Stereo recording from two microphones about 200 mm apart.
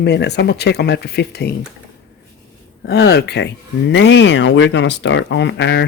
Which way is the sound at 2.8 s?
55° left (ahead or behind).